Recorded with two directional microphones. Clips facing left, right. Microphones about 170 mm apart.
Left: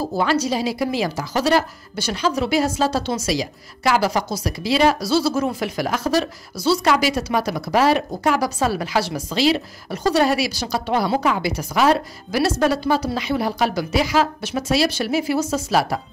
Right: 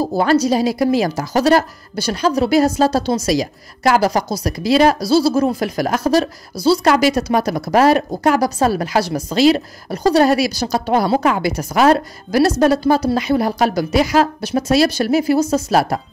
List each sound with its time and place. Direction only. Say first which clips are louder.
0.1 s a woman's voice: right 6 dB; 40° right (ahead or behind)